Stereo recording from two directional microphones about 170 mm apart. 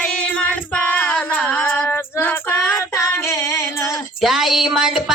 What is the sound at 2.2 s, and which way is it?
Child singing, 15° left (ahead or behind).